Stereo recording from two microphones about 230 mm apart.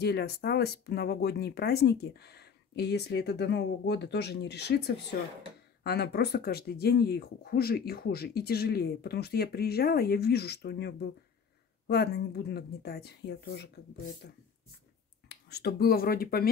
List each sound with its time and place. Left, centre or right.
0.0 s speech: left
15.2 s speech: left